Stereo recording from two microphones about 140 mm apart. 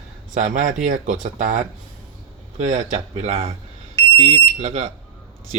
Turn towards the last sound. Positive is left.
turn(degrees=-50)  # may be behind; listen again after turning